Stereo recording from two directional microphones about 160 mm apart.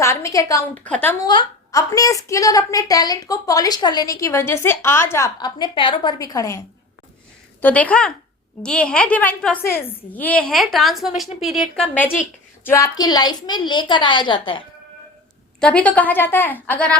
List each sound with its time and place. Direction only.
0.0 s a sound: 20° left (ahead or behind)
0.9 s a woman's voice: 10° left (ahead or behind)
1.2 s a woman's voice: 25° left (ahead or behind)
7.6 s a woman's voice: 10° left (ahead or behind)
12.6 s a woman's voice: 20° left (ahead or behind)
15.6 s a woman's voice: 5° left (ahead or behind)